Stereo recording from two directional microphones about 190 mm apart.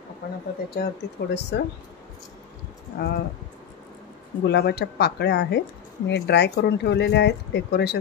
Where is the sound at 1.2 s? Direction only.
65° left (ahead or behind).